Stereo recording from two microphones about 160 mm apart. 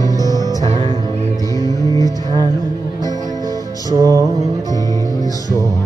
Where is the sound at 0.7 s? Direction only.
35° right (ahead or behind).